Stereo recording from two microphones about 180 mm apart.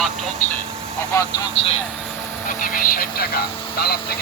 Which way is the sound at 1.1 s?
15° left (ahead or behind).